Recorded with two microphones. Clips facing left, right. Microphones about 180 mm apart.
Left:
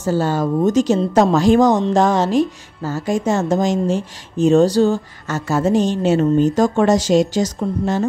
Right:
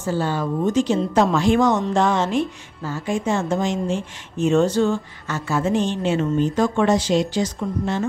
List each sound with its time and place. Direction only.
0.0 s a woman's voice: 40° left (ahead or behind)